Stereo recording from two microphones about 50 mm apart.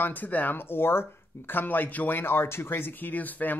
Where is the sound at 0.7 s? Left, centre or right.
Left.